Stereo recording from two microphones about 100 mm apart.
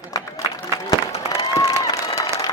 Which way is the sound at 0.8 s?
35° left (ahead or behind).